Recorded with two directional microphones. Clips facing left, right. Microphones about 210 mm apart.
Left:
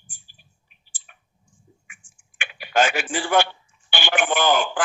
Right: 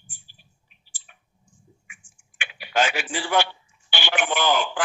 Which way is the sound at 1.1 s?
50° left (ahead or behind).